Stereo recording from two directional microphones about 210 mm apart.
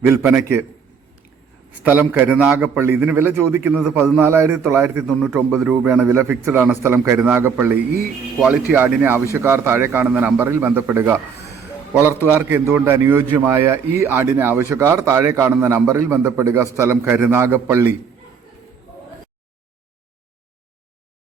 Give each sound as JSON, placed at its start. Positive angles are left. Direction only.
{"t": 0.0, "sound": "a man's voice", "side_deg": -10}
{"t": 1.8, "sound": "a man's voice", "side_deg": -10}
{"t": 5.5, "sound": "a man's voice", "side_deg": -10}